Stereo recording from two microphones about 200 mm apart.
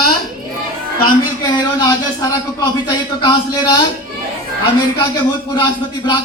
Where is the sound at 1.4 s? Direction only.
20° left (ahead or behind).